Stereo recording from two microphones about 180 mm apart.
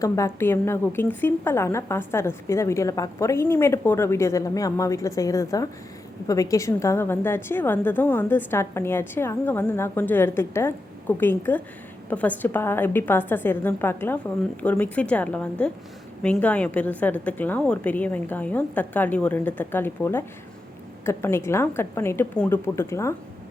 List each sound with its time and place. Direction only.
0.0 s a woman's voice: 15° left (ahead or behind)